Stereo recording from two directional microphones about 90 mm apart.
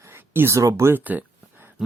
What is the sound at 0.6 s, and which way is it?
Speech, 35° right (ahead or behind).